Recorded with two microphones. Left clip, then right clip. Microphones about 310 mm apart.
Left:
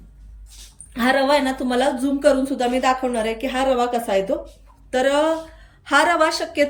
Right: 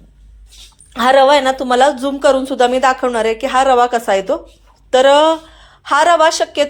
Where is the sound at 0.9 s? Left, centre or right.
Centre.